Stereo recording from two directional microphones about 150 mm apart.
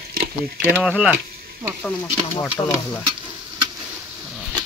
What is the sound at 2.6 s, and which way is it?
Stir, 30° left (ahead or behind).